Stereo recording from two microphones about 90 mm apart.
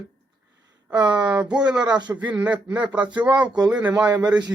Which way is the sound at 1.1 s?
10° right (ahead or behind).